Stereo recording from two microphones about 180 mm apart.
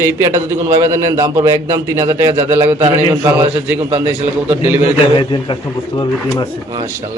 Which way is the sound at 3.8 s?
30° right (ahead or behind).